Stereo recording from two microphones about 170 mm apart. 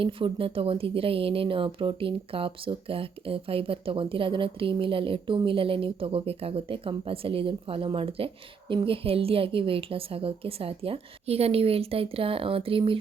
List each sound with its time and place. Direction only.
0.0 s a woman's voice: 30° right (ahead or behind)